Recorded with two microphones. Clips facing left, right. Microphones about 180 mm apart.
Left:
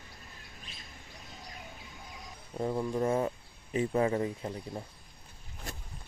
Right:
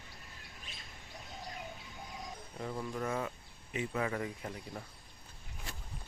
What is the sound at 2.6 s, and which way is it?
Speech, 30° left (ahead or behind).